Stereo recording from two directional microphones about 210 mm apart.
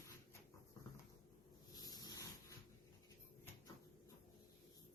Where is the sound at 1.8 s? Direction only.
20° left (ahead or behind).